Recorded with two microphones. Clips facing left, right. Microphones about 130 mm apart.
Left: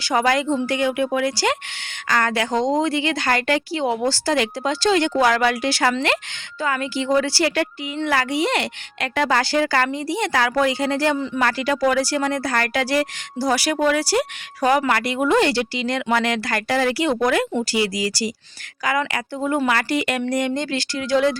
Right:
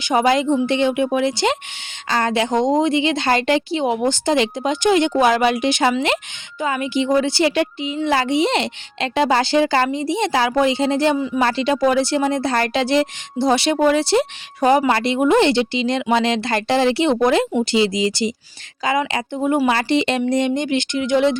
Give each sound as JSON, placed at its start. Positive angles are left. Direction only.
{"t": 0.0, "sound": "speech", "side_deg": -20}